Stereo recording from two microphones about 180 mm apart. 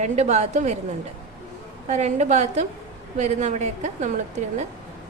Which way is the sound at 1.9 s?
40° right (ahead or behind).